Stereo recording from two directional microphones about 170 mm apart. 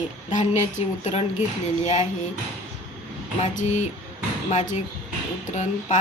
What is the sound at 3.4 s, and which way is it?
Speech, 45° left (ahead or behind).